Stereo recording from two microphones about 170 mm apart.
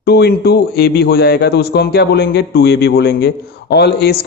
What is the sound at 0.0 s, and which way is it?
A man's voice, 75° left (ahead or behind).